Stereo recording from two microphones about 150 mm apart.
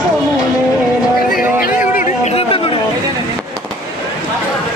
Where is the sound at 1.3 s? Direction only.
70° left (ahead or behind).